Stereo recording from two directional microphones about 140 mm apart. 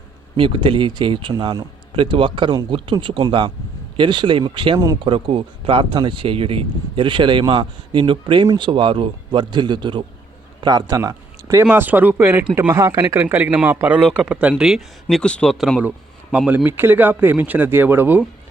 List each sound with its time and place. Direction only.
0.3 s speech: 40° right (ahead or behind)
11.6 s speech: 10° right (ahead or behind)
16.6 s speech: 15° right (ahead or behind)